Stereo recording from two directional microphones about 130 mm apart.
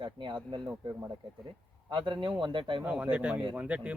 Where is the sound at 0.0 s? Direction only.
40° right (ahead or behind).